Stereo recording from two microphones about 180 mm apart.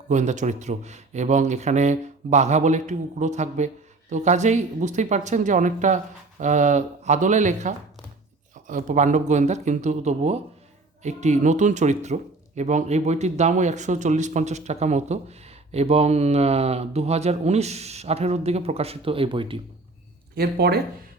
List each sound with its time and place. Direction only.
0.1 s speech: 40° right (ahead or behind)
20.3 s speech: 60° right (ahead or behind)